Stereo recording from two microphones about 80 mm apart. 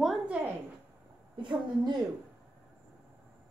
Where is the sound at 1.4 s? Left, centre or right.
Right.